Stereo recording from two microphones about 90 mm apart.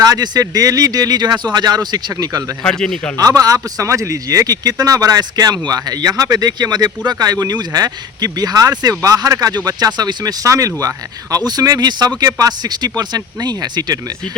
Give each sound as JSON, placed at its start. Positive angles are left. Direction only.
{"t": 0.0, "sound": "speech", "side_deg": -45}
{"t": 2.6, "sound": "speech", "side_deg": 5}
{"t": 3.2, "sound": "speech", "side_deg": -40}